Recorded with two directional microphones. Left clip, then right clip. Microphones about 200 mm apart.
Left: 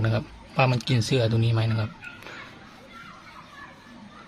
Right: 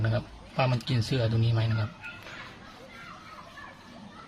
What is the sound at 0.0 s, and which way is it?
Speech, 25° left (ahead or behind).